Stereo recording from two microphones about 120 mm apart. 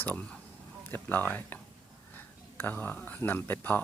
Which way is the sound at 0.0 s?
15° left (ahead or behind).